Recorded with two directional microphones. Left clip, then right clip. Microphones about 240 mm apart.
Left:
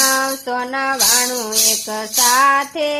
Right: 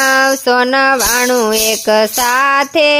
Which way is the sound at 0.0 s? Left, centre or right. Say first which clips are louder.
Right 7 dB; right.